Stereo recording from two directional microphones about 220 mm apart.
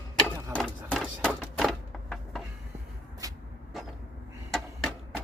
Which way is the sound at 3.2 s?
15° right (ahead or behind).